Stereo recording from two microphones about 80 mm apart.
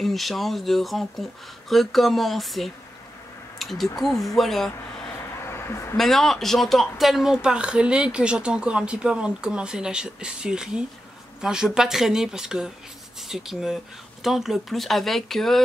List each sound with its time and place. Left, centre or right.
0.0 s speech: centre
5.4 s a sound: left
5.9 s speech: centre